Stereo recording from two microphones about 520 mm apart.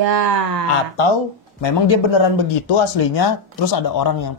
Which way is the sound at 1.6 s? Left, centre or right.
Left.